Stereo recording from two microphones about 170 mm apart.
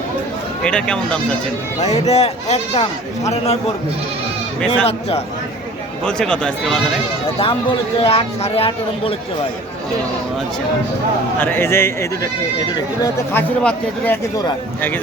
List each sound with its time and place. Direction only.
0.6 s speech: 5° left (ahead or behind)
1.9 s speech: 40° left (ahead or behind)
4.9 s speech: 35° left (ahead or behind)
6.1 s speech: 5° left (ahead or behind)
7.3 s speech: 35° left (ahead or behind)
11.3 s speech: 10° left (ahead or behind)
13.3 s speech: 10° left (ahead or behind)